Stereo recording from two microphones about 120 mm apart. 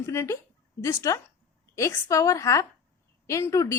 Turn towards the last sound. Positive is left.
turn(degrees=25)  # may be behind; listen again after turning